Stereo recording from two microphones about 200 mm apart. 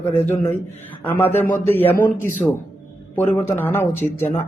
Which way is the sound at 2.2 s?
40° left (ahead or behind).